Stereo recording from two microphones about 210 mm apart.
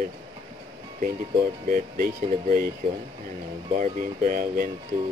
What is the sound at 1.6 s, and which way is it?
Speech, 45° right (ahead or behind).